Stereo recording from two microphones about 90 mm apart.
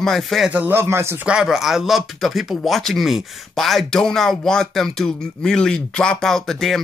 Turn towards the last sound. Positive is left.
turn(degrees=5)  # may be behind; listen again after turning